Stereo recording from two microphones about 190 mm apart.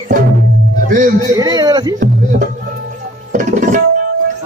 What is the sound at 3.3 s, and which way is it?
Music, 40° right (ahead or behind).